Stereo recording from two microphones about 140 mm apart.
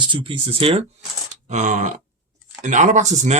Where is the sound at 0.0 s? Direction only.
35° right (ahead or behind).